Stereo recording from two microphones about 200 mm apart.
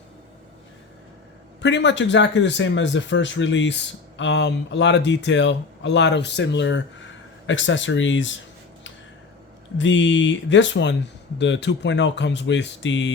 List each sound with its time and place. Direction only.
1.6 s speech: 60° left (ahead or behind)
9.7 s speech: 65° left (ahead or behind)